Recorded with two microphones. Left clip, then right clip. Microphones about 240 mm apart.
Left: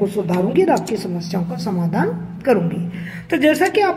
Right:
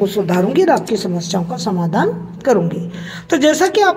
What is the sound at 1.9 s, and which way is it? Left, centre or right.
A woman's voice, centre.